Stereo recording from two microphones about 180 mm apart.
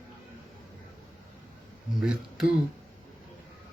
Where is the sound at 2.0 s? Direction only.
5° right (ahead or behind).